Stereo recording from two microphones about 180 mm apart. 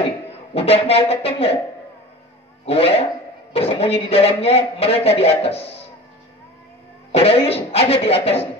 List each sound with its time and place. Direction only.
0.6 s a man's voice: 35° left (ahead or behind)
2.6 s a man's voice: 35° left (ahead or behind)
7.1 s a man's voice: 35° left (ahead or behind)